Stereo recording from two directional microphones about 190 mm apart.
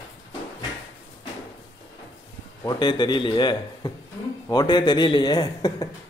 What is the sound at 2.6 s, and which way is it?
A man's voice, 25° left (ahead or behind).